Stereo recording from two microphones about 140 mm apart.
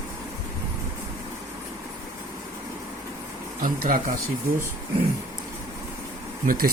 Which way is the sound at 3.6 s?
90° right.